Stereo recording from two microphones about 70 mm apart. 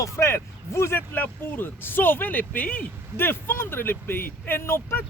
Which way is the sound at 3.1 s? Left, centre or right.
Left.